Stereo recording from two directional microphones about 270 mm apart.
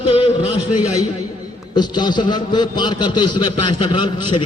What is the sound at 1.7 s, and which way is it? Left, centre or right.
A man's voice, centre.